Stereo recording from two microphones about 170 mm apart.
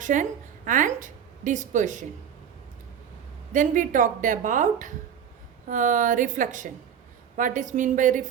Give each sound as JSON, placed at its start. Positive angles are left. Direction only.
{"t": 0.0, "sound": "a woman's voice", "side_deg": -50}
{"t": 3.5, "sound": "a woman's voice", "side_deg": -50}